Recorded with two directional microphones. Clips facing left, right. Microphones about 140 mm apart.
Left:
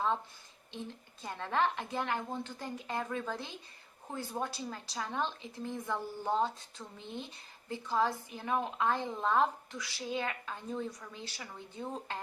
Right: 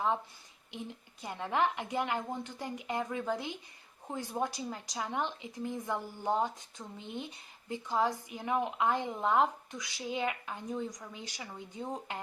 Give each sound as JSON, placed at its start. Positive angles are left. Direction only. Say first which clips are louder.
{"t": 1.2, "sound": "speech", "louder": "right 1 dB", "side_deg": -15}